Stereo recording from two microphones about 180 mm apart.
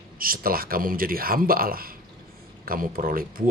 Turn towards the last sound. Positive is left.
turn(degrees=-50)  # may be behind; listen again after turning